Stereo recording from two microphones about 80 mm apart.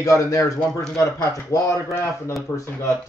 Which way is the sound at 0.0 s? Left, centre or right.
Left.